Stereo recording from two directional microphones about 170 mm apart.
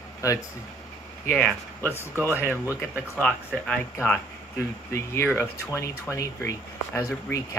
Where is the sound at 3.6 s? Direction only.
10° left (ahead or behind).